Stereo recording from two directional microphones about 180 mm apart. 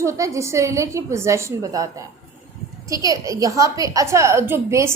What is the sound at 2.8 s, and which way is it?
A woman's voice, 20° right (ahead or behind).